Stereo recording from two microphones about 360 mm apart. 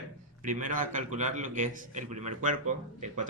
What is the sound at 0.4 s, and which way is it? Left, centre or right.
A man's voice, right.